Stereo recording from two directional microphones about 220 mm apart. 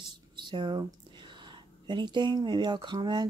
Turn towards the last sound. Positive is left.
turn(degrees=-20)  # may be behind; listen again after turning